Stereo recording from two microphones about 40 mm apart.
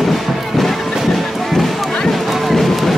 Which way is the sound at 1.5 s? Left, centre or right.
Centre.